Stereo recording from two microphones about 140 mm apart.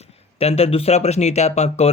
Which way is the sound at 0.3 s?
45° left (ahead or behind).